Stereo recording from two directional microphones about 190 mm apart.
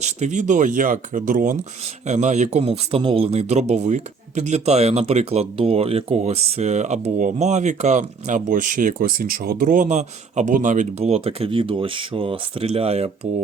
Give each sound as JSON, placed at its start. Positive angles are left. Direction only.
{"t": 0.0, "sound": "speech", "side_deg": -40}